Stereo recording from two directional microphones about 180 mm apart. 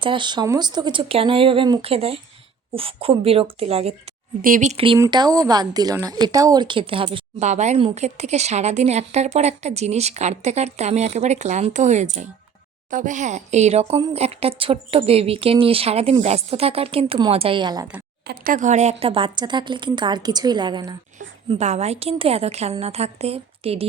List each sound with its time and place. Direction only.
0.0 s a woman's voice: 25° right (ahead or behind)
4.4 s a woman's voice: 45° right (ahead or behind)
4.9 s a woman's voice: 20° right (ahead or behind)
18.3 s speech: 50° right (ahead or behind); by 20.9 s 25° right (ahead or behind)
21.5 s a woman's voice: 40° right (ahead or behind)